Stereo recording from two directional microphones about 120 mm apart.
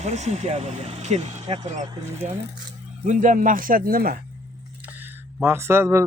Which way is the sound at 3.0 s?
90° right.